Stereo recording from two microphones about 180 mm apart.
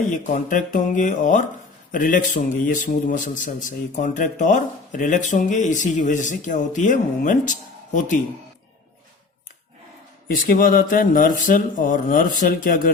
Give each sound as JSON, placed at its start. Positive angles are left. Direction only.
{"t": 0.1, "sound": "a man's voice", "side_deg": 45}
{"t": 10.2, "sound": "a man's voice", "side_deg": 55}